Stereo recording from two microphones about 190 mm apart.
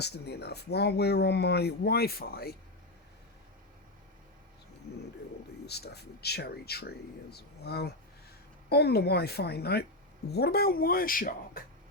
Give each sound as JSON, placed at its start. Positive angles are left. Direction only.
{"t": 0.0, "sound": "speech", "side_deg": 60}
{"t": 5.6, "sound": "speech", "side_deg": 60}